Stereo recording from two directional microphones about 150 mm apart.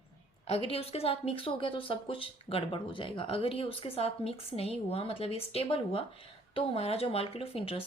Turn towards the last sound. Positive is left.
turn(degrees=40)  # may be behind; listen again after turning